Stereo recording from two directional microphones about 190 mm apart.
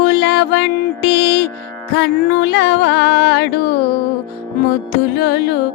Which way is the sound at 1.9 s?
65° left (ahead or behind).